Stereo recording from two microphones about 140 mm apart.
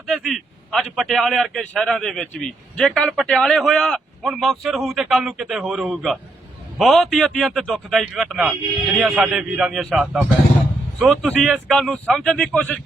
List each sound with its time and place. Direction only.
0.1 s a man's voice: centre (ahead or behind)